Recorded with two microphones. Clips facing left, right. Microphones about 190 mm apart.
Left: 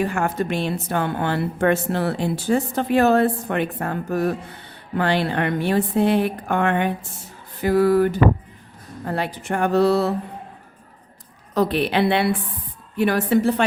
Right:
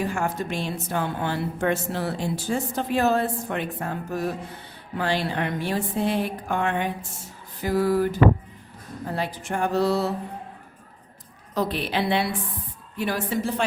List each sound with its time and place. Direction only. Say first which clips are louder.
0.0 s a woman's voice: left 4 dB; 65° left (ahead or behind)
11.5 s a woman's voice: left 6 dB; 65° left (ahead or behind)